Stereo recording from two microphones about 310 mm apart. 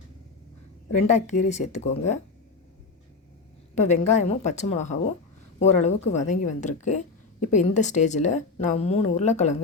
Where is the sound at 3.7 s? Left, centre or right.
Left.